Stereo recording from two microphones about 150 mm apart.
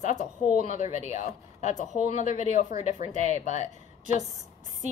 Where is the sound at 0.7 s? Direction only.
55° left (ahead or behind).